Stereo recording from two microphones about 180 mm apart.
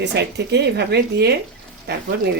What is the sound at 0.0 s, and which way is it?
Speech, 70° right (ahead or behind).